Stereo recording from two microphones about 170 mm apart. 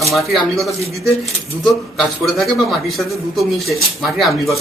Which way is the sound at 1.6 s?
Centre (ahead or behind).